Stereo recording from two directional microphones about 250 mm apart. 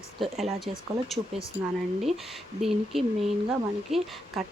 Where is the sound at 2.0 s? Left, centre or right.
Centre.